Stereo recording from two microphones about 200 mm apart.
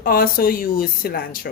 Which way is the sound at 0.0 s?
45° left (ahead or behind).